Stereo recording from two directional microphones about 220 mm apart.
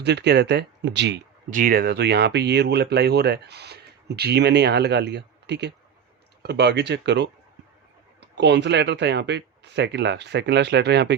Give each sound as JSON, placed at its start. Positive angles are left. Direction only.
{"t": 0.0, "sound": "speech", "side_deg": -50}
{"t": 1.5, "sound": "speech", "side_deg": -40}